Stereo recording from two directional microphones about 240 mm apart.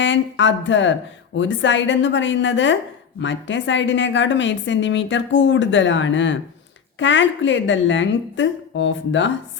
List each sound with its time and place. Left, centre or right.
0.0 s a woman's voice: left